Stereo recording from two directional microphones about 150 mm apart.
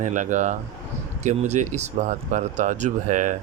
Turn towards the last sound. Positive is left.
turn(degrees=-55)  # may be behind; listen again after turning